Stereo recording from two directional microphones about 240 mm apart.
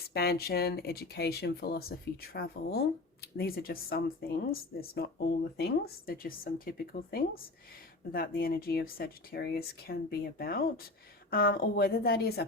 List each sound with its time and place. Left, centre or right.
0.1 s speech: left